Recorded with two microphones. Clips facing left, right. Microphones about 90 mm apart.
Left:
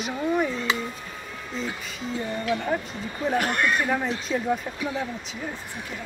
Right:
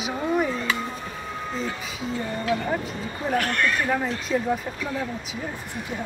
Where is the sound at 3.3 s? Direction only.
20° left (ahead or behind).